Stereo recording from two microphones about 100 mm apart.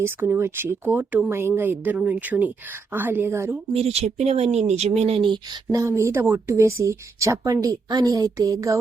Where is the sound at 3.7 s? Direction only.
90° right; by 5.6 s 55° right (ahead or behind).